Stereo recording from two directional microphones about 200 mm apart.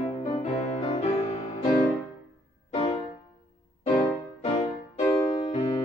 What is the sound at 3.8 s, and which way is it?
Music, 20° left (ahead or behind).